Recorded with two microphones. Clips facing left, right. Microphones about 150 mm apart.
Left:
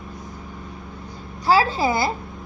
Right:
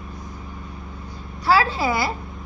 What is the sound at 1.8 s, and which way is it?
Speech, 25° left (ahead or behind).